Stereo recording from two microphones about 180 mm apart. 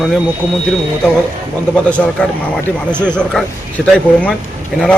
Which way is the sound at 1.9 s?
5° left (ahead or behind).